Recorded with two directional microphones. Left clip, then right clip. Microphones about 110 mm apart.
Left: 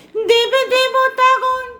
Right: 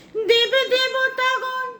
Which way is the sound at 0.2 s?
40° left (ahead or behind).